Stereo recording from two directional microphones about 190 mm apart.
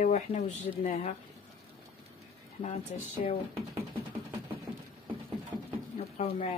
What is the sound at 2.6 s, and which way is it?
Speech, 35° left (ahead or behind).